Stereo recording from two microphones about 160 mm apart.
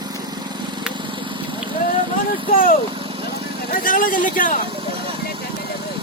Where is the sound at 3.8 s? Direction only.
60° left (ahead or behind).